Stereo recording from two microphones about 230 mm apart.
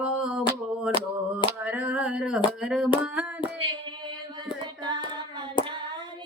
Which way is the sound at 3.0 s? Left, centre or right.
Centre.